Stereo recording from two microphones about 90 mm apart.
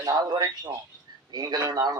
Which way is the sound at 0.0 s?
45° right (ahead or behind).